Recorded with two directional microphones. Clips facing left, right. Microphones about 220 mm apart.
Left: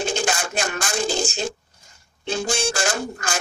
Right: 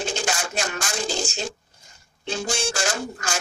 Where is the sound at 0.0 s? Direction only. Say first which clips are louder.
Left 3 dB; 55° left (ahead or behind).